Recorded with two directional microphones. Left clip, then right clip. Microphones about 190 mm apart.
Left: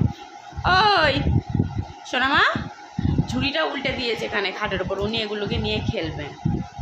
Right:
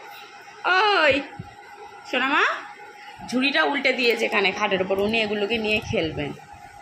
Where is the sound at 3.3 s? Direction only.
20° right (ahead or behind).